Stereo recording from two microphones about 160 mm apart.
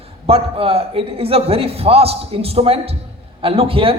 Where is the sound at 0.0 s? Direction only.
40° right (ahead or behind).